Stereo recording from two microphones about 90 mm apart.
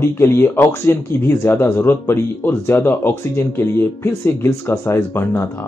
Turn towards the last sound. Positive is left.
turn(degrees=30)  # may be behind; listen again after turning